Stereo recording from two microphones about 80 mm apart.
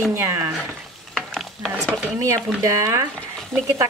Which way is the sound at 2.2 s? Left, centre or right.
Right.